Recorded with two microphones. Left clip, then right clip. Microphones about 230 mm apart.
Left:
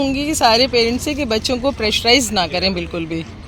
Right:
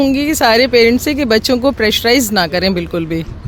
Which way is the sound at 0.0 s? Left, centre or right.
Right.